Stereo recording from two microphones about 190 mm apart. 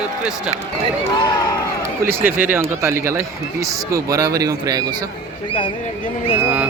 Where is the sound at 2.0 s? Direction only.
10° right (ahead or behind).